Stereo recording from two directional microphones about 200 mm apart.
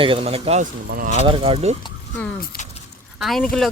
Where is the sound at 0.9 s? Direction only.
45° right (ahead or behind).